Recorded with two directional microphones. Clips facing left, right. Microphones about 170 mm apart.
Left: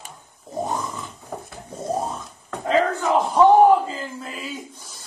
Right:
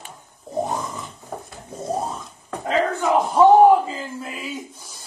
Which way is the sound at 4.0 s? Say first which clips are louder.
Right 1 dB; 10° right (ahead or behind).